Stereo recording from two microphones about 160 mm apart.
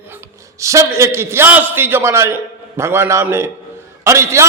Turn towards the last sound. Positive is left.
turn(degrees=-15)  # may be behind; listen again after turning